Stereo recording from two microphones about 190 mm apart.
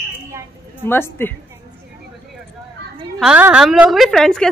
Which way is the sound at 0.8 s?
10° left (ahead or behind).